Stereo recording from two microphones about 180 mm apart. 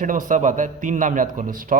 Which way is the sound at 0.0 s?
45° right (ahead or behind).